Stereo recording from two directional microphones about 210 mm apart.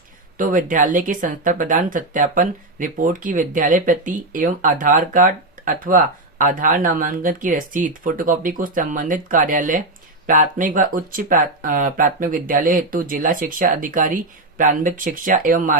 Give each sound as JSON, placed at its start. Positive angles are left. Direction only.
{"t": 0.3, "sound": "speech", "side_deg": -40}